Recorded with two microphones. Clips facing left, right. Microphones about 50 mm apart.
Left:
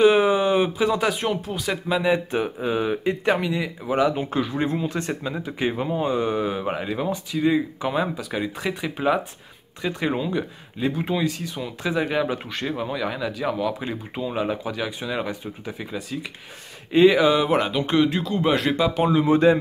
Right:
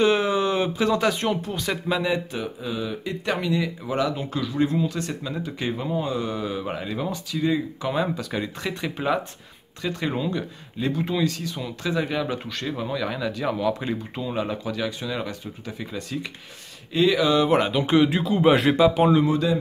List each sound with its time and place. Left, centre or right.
0.0 s speech: centre
2.0 s speech: left
3.3 s speech: centre
16.9 s speech: left
17.4 s speech: centre
19.2 s speech: left